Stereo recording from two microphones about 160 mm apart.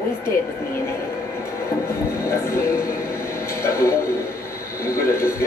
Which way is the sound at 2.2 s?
15° left (ahead or behind).